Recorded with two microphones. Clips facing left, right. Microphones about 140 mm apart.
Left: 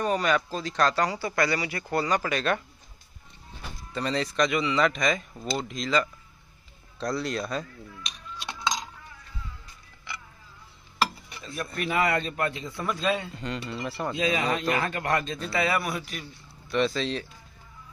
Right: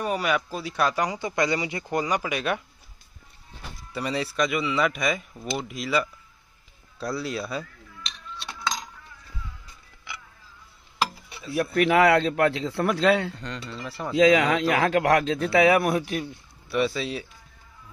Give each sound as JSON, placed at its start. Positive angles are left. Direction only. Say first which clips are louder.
{"t": 0.0, "sound": "speech", "louder": "left 1 dB", "side_deg": -10}
{"t": 3.9, "sound": "speech", "louder": "even", "side_deg": -10}
{"t": 8.4, "sound": "coin", "louder": "left 2 dB", "side_deg": 0}
{"t": 11.0, "sound": "chopping", "louder": "even", "side_deg": -5}
{"t": 11.7, "sound": "a man's voice", "louder": "right 7 dB", "side_deg": -80}
{"t": 13.3, "sound": "speech", "louder": "left 2 dB", "side_deg": 5}
{"t": 14.1, "sound": "a man's voice", "louder": "right 10 dB", "side_deg": -90}
{"t": 16.6, "sound": "speech", "louder": "even", "side_deg": -10}